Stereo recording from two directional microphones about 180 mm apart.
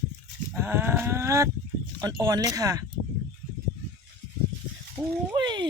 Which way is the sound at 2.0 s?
20° right (ahead or behind).